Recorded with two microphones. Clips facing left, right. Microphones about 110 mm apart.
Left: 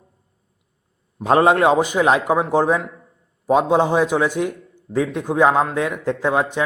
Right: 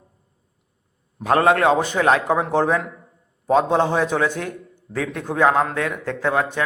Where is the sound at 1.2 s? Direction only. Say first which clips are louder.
Left 2 dB; 20° left (ahead or behind).